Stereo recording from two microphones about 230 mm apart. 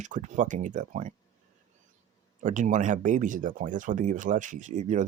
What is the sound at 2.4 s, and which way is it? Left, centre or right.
Speech, right.